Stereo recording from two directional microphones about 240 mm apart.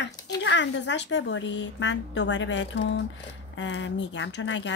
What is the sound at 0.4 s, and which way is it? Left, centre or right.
A woman's voice, left.